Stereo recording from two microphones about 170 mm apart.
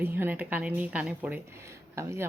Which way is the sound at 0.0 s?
10° right (ahead or behind).